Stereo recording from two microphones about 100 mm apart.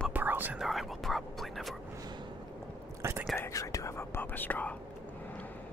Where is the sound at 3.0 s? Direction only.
25° right (ahead or behind).